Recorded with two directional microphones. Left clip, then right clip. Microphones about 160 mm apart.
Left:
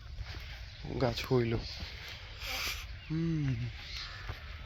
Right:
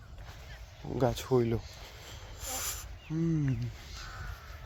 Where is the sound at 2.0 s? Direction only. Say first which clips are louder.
Left 1 dB; 40° right (ahead or behind).